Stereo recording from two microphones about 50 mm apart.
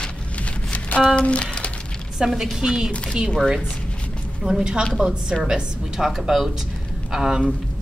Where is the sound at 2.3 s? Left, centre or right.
Centre.